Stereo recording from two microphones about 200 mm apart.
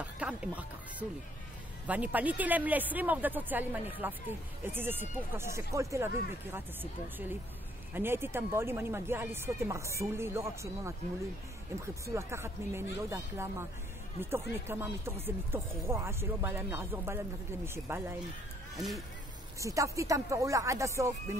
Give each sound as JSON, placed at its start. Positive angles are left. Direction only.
{"t": 0.0, "sound": "music", "side_deg": -5}
{"t": 1.9, "sound": "speech", "side_deg": -10}
{"t": 18.8, "sound": "speech", "side_deg": 0}
{"t": 19.6, "sound": "speech", "side_deg": -15}